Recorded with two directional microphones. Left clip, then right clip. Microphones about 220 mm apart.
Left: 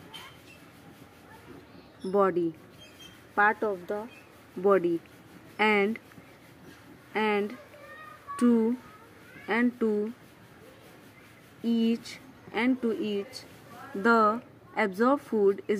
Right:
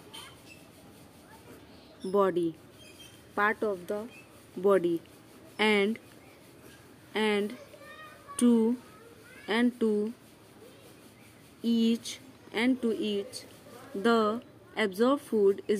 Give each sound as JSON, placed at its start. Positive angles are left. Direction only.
{"t": 2.0, "sound": "a woman's voice", "side_deg": -15}
{"t": 7.1, "sound": "speech", "side_deg": -20}
{"t": 11.6, "sound": "a woman's voice", "side_deg": -20}